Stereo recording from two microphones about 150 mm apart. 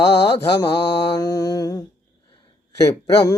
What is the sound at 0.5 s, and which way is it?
Mantra, 25° left (ahead or behind).